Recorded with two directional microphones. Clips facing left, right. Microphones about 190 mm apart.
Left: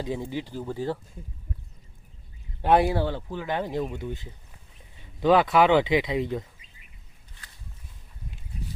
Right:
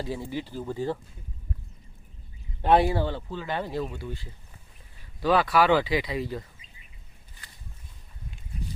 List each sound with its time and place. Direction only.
0.0 s speech: 15° left (ahead or behind)
2.6 s speech: 10° left (ahead or behind)